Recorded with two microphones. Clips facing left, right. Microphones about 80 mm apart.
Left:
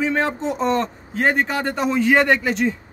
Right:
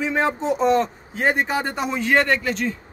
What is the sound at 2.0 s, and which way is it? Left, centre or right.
Speech, centre.